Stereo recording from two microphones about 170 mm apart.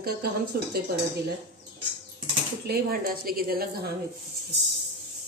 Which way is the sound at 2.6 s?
60° right (ahead or behind).